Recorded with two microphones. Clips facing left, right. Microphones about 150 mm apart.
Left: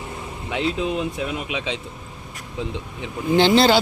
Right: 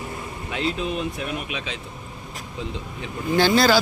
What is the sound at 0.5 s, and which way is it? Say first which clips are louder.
Speech: left 3 dB; 20° left (ahead or behind).